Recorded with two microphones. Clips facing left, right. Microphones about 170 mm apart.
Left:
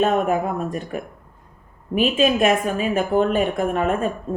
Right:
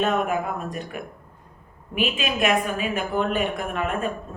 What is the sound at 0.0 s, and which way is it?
A woman's voice, 40° left (ahead or behind).